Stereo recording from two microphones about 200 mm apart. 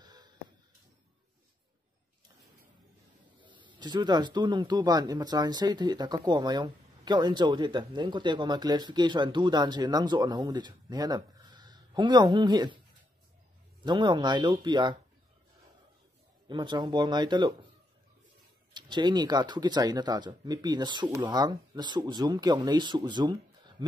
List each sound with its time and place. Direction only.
0.0 s a sound: 20° right (ahead or behind)
3.3 s speech: 25° right (ahead or behind)
13.8 s speech: 25° right (ahead or behind)
16.4 s speech: 25° right (ahead or behind)
18.7 s speech: 20° right (ahead or behind)